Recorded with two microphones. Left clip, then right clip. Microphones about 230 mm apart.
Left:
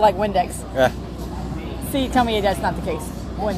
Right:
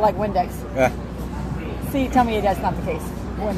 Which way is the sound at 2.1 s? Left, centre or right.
Left.